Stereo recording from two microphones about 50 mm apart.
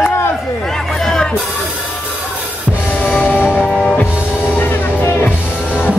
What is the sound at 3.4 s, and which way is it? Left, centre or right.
Music, left.